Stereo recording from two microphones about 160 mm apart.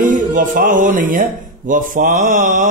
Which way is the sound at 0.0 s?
55° right (ahead or behind).